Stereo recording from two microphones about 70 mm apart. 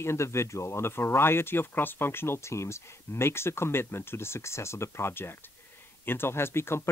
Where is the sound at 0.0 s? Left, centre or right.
Left.